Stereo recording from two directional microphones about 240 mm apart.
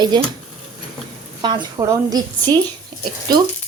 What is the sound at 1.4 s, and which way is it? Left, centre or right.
Speech, centre.